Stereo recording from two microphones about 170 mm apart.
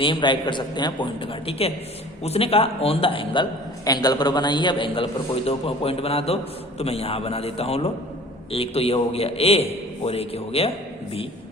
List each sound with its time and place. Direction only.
0.0 s a man's voice: 30° left (ahead or behind)